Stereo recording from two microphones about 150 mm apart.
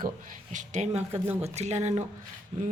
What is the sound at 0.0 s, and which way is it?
Speech, 60° right (ahead or behind).